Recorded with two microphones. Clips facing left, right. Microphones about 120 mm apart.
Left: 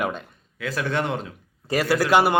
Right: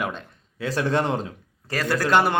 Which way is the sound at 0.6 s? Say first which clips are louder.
Right 2 dB; 30° right (ahead or behind).